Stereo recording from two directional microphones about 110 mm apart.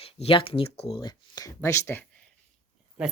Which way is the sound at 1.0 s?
35° left (ahead or behind).